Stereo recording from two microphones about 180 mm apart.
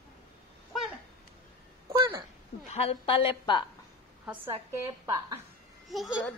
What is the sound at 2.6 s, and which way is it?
A woman's voice, 35° left (ahead or behind).